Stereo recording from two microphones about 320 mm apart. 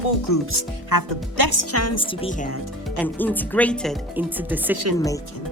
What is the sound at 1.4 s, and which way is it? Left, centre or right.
Speech, right.